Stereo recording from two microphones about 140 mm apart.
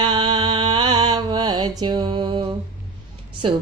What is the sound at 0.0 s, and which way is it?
Music, 35° right (ahead or behind).